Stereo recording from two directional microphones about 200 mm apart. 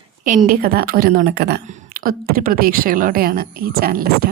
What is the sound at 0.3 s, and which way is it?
A woman's voice, 40° right (ahead or behind).